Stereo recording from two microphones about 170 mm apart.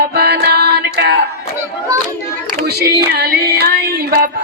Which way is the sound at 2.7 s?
70° right (ahead or behind).